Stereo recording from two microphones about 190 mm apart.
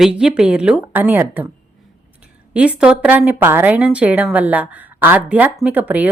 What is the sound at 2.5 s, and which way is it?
Speech, 5° right (ahead or behind).